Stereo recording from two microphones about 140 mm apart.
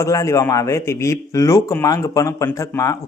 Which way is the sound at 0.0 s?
20° left (ahead or behind).